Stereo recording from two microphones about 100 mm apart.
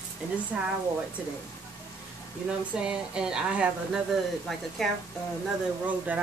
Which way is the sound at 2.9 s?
10° right (ahead or behind).